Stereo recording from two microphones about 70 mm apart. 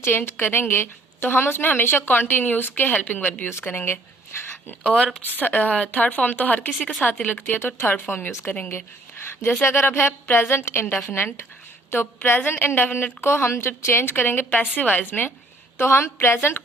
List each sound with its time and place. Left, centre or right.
0.0 s a woman's voice: left
4.8 s a woman's voice: centre
15.8 s speech: left